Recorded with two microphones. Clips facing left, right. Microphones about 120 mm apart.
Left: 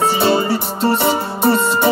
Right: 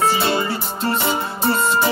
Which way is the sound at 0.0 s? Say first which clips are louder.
Left 4 dB; 30° left (ahead or behind).